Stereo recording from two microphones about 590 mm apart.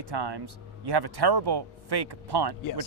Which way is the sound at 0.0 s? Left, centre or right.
Right.